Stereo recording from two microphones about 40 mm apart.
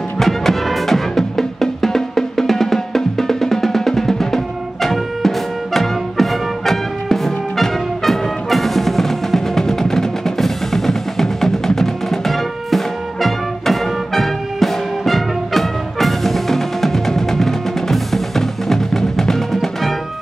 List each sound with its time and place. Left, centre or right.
0.2 s music: centre